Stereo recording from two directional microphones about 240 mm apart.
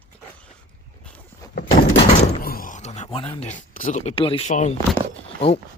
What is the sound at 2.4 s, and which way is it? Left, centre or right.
Speech, left.